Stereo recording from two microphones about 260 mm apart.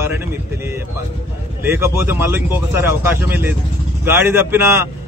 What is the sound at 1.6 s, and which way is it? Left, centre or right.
A man's voice, centre.